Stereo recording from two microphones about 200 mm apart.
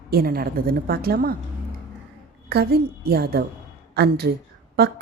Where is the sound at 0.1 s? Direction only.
50° right (ahead or behind).